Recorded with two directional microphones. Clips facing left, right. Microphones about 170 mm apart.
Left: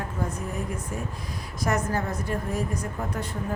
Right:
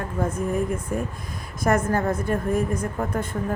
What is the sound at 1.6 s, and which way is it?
A woman's voice, 50° right (ahead or behind).